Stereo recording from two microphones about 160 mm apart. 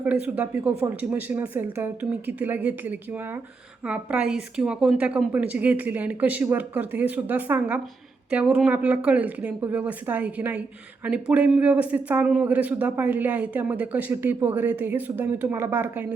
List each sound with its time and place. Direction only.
0.0 s speech: 10° right (ahead or behind)